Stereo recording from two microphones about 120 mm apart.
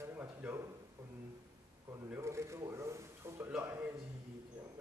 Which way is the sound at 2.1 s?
25° right (ahead or behind).